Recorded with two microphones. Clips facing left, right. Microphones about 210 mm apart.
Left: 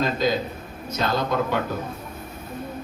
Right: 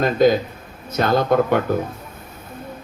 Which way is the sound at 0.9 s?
55° right (ahead or behind).